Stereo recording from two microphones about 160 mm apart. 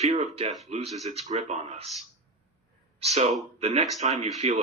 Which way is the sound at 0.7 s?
40° right (ahead or behind).